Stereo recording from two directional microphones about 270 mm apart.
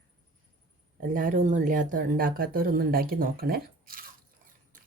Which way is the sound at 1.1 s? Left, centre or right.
Right.